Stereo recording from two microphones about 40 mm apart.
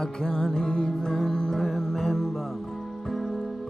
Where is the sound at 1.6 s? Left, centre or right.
Centre.